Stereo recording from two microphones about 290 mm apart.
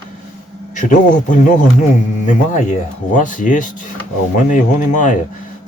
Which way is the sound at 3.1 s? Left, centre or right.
Left.